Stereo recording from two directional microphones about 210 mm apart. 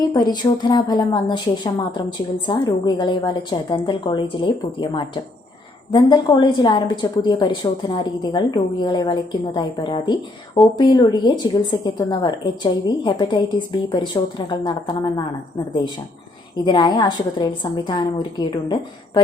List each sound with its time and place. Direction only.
0.1 s a woman's voice: 20° left (ahead or behind)
16.6 s a woman's voice: 20° left (ahead or behind)